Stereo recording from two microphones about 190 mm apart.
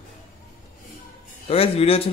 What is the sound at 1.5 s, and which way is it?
Speech, 30° left (ahead or behind).